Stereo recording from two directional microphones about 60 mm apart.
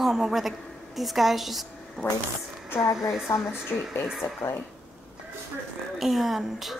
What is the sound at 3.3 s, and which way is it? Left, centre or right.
Speech, left.